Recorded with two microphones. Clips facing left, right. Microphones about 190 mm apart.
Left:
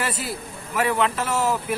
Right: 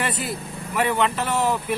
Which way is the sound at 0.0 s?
5° left (ahead or behind).